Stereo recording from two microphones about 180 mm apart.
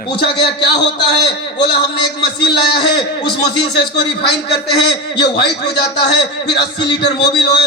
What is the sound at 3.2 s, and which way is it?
A man's voice, 70° left (ahead or behind).